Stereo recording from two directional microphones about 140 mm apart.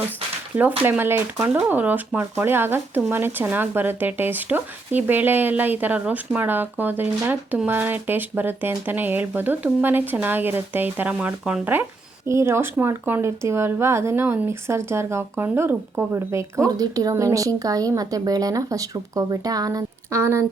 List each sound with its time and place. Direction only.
0.9 s speech: 15° right (ahead or behind)